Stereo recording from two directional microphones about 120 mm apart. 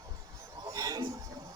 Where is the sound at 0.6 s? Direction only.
30° right (ahead or behind).